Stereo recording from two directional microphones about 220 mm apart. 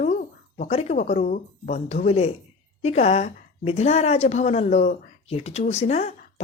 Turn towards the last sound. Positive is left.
turn(degrees=30)  # may be behind; listen again after turning